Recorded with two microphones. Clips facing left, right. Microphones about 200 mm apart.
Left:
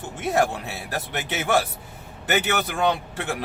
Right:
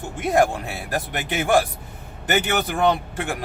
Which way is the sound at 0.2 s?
15° right (ahead or behind).